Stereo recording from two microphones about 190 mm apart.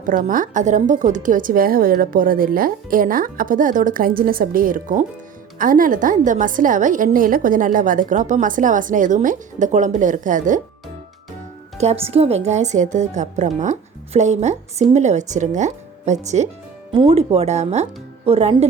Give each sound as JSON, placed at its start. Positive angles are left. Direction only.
{"t": 0.0, "sound": "a woman's voice", "side_deg": -45}
{"t": 11.8, "sound": "speech", "side_deg": -35}